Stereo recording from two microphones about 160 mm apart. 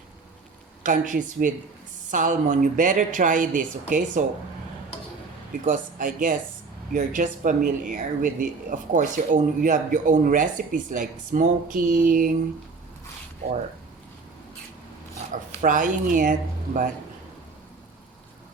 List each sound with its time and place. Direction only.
0.8 s speech: 55° right (ahead or behind)
5.6 s speech: 55° right (ahead or behind)
15.3 s speech: 55° right (ahead or behind)